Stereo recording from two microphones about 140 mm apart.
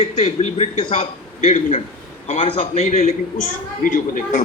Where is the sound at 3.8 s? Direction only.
65° left (ahead or behind).